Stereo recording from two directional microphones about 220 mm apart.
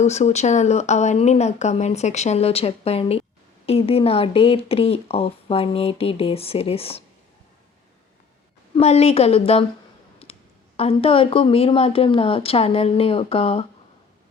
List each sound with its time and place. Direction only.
0.0 s speech: 30° left (ahead or behind)
8.7 s speech: 30° left (ahead or behind)
10.2 s clicking: 25° left (ahead or behind)
10.8 s speech: 25° left (ahead or behind)